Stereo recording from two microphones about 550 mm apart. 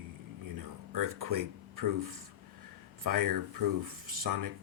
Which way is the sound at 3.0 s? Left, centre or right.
Right.